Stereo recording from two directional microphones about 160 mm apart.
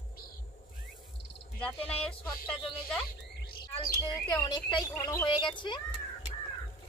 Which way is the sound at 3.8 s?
25° left (ahead or behind).